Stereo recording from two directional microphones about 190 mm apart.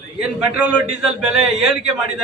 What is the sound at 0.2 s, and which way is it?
Speech, 5° right (ahead or behind).